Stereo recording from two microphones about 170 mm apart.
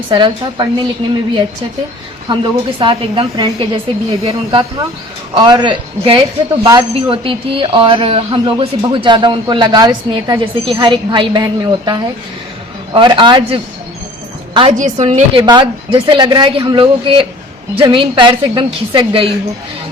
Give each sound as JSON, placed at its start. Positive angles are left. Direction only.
{"t": 0.1, "sound": "a man's voice", "side_deg": -25}
{"t": 2.3, "sound": "a man's voice", "side_deg": -30}
{"t": 14.7, "sound": "a woman's voice", "side_deg": -45}
{"t": 15.4, "sound": "a man's voice", "side_deg": -25}